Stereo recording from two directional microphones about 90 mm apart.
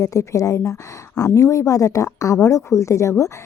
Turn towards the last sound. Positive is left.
turn(degrees=35)  # may be behind; listen again after turning